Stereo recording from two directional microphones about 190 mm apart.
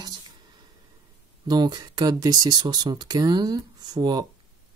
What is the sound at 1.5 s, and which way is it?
Speech, 20° right (ahead or behind).